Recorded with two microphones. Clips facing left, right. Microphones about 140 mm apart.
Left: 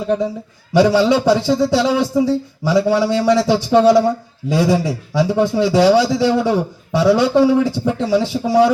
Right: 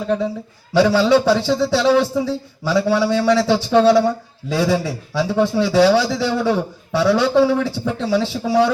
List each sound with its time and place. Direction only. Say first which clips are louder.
0.7 s a man's voice: left 1 dB; 15° left (ahead or behind)